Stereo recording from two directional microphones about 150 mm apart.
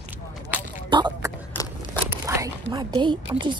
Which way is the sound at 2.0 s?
20° right (ahead or behind).